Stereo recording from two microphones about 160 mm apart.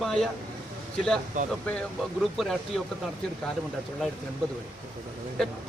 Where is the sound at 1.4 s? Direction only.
55° right (ahead or behind).